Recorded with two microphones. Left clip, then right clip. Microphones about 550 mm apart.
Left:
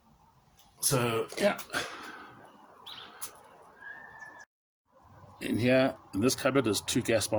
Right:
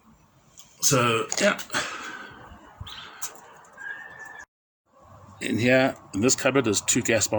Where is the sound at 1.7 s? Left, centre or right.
Left.